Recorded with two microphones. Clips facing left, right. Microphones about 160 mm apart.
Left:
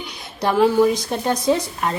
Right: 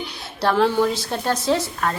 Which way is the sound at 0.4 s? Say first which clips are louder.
Left 3 dB; 10° left (ahead or behind).